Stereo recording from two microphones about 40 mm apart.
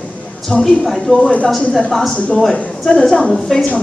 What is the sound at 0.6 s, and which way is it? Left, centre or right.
Speech, centre.